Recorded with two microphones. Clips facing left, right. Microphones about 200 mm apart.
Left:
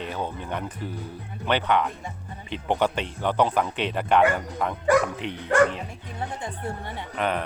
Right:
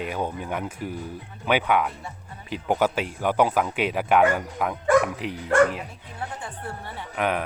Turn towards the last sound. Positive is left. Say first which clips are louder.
# right 1 dB
turn(degrees=-5)  # may be behind; listen again after turning